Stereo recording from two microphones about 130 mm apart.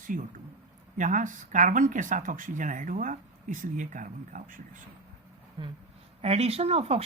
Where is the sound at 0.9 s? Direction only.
80° right.